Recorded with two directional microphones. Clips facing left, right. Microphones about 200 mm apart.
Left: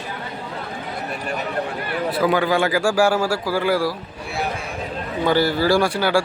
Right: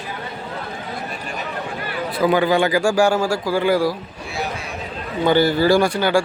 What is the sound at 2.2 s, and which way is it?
Speech, centre (ahead or behind).